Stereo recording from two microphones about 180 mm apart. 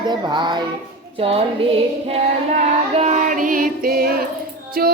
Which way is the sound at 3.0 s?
40° right (ahead or behind).